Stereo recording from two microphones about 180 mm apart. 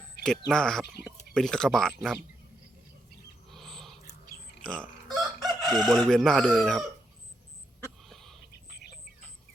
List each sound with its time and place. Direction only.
0.2 s speech: 5° left (ahead or behind)
3.5 s owl: centre (ahead or behind)
4.6 s speech: 5° left (ahead or behind)
5.0 s chicken: 25° right (ahead or behind)
5.8 s speech: centre (ahead or behind)
8.0 s a sound: centre (ahead or behind)